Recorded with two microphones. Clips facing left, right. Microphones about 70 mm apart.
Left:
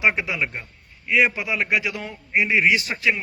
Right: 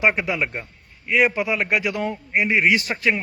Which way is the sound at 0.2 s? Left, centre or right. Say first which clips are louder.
Right 2 dB; right.